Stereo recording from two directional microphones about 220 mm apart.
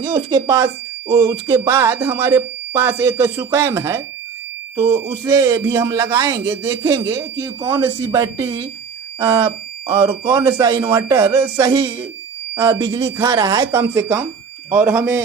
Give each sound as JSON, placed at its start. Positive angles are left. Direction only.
{"t": 0.0, "sound": "speech", "side_deg": -15}